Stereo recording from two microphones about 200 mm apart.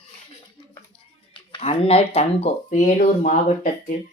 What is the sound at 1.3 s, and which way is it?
Speech, 25° left (ahead or behind).